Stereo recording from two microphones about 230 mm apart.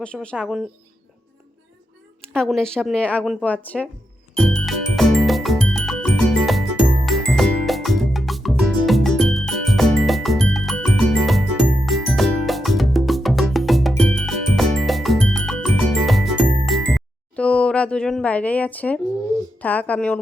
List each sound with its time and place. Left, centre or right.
0.0 s speech: centre
2.3 s speech: centre
4.4 s music: centre
19.5 s speech: centre